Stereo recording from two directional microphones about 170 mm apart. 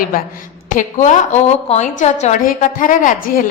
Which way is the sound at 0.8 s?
45° left (ahead or behind).